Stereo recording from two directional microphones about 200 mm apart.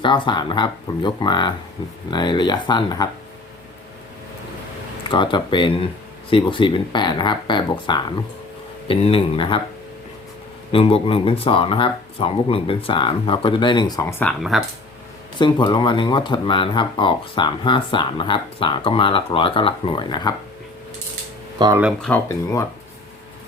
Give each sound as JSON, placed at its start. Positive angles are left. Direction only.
{"t": 0.0, "sound": "speech", "side_deg": 25}
{"t": 5.0, "sound": "speech", "side_deg": 25}
{"t": 10.7, "sound": "speech", "side_deg": 30}
{"t": 15.4, "sound": "speech", "side_deg": 20}
{"t": 21.6, "sound": "speech", "side_deg": -20}
{"t": 22.0, "sound": "speech", "side_deg": 10}